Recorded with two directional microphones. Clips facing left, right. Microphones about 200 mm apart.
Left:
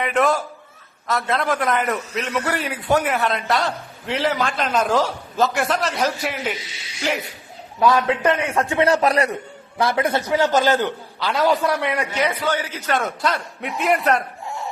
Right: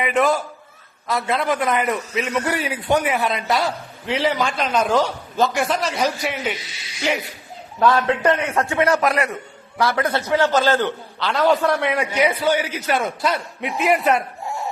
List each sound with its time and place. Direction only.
0.0 s a man's voice: centre (ahead or behind)
7.8 s a man's voice: 10° left (ahead or behind)
8.8 s a man's voice: 30° left (ahead or behind)
9.7 s a man's voice: 20° left (ahead or behind); by 14.3 s centre (ahead or behind)